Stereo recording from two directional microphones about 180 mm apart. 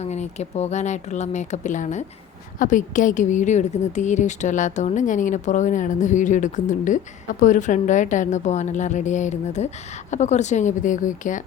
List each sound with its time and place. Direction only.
0.0 s a woman's voice: 40° left (ahead or behind)